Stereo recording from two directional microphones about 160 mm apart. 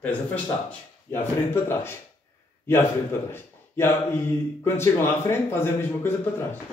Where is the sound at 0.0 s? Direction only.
10° left (ahead or behind).